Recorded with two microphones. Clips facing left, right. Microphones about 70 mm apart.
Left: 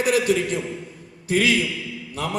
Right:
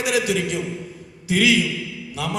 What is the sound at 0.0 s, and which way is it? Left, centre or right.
A man's voice, left.